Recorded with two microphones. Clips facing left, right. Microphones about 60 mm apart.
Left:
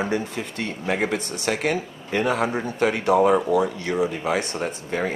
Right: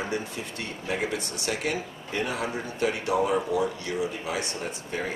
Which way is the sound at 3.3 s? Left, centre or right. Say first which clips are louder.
Left 6 dB; left.